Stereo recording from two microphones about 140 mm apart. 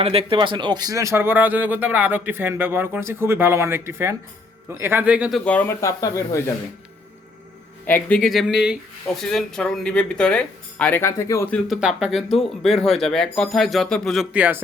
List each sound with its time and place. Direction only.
0.0 s speech: 45° right (ahead or behind); by 5.4 s 10° right (ahead or behind)
5.5 s speech: 10° left (ahead or behind)
5.8 s speech: 25° left (ahead or behind)
7.9 s speech: 15° left (ahead or behind)
8.2 s speech: centre (ahead or behind); by 11.4 s 20° left (ahead or behind)
11.5 s speech: 5° right (ahead or behind)
14.3 s speech: 10° right (ahead or behind)